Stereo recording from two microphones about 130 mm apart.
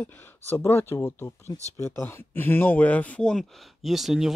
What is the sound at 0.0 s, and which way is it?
Speech, 15° left (ahead or behind).